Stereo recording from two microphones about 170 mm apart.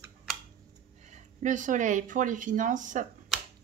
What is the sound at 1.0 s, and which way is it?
Speech, 45° right (ahead or behind).